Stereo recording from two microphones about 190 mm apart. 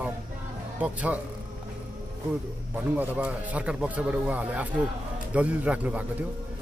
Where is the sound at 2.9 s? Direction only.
10° right (ahead or behind).